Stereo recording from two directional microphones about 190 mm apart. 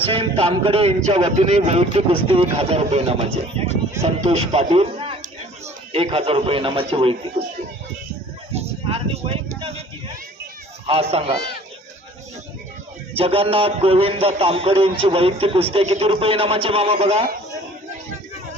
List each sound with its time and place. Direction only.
0.0 s a man's voice: 30° right (ahead or behind)
8.5 s speech: 30° right (ahead or behind)
10.8 s a man's voice: 30° right (ahead or behind)
13.1 s a man's voice: 30° right (ahead or behind)